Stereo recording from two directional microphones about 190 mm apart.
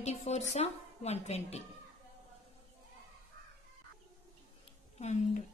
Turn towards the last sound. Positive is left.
turn(degrees=40)  # may be behind; listen again after turning